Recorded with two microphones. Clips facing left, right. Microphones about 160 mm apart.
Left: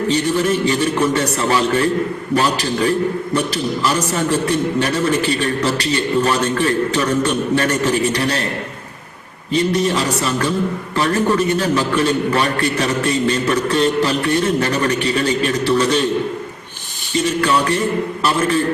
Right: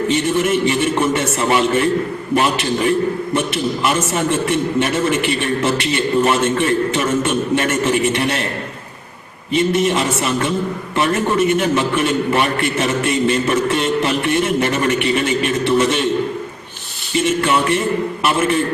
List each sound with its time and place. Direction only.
0.7 s a man's voice: 25° right (ahead or behind)
9.5 s a man's voice: 25° right (ahead or behind)
17.2 s a sound: 25° right (ahead or behind)
18.2 s a man's voice: 25° right (ahead or behind)